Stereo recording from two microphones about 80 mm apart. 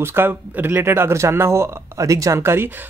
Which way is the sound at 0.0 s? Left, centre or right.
Right.